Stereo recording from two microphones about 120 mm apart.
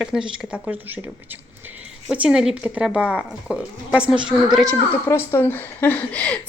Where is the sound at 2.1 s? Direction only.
10° right (ahead or behind).